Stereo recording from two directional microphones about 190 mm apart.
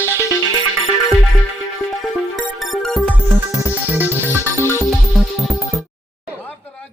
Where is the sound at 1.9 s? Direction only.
Centre (ahead or behind).